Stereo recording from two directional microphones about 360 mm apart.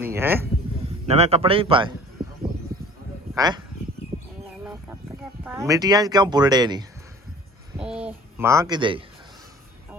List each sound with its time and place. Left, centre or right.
0.0 s speech: centre
1.0 s speech: centre
3.3 s speech: centre
4.6 s a sound: centre
5.4 s speech: centre
7.8 s a sound: centre